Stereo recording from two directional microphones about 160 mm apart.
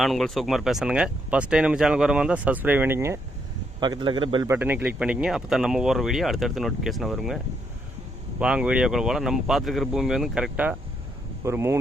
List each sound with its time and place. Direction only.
0.0 s speech: centre (ahead or behind); by 3.2 s 15° right (ahead or behind)
3.8 s a man's voice: 25° right (ahead or behind)
4.4 s speech: 10° right (ahead or behind)
8.4 s speech: 5° right (ahead or behind)